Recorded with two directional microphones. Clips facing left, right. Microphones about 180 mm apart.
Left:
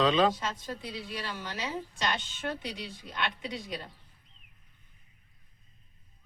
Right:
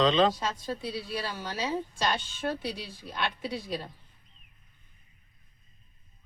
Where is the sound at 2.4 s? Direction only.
30° right (ahead or behind).